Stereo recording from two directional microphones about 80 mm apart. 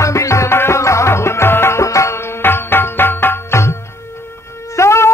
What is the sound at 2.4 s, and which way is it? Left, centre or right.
Music, left.